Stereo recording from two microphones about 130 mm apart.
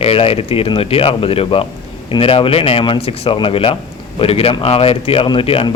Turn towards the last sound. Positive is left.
turn(degrees=45)  # may be behind; listen again after turning